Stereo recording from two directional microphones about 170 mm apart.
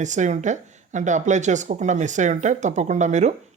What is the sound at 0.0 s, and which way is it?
Speech, 45° right (ahead or behind).